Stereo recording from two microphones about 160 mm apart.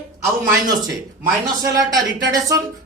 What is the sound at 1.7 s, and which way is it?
Speech, 25° right (ahead or behind).